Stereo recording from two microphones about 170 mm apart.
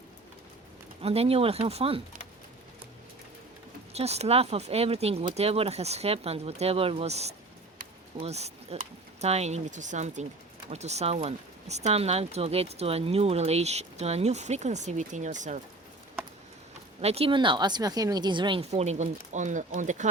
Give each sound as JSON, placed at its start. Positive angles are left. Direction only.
{"t": 1.0, "sound": "speech", "side_deg": -35}
{"t": 3.9, "sound": "speech", "side_deg": -40}
{"t": 17.0, "sound": "speech", "side_deg": -35}